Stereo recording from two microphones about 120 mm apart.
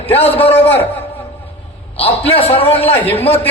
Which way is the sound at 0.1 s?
55° left (ahead or behind).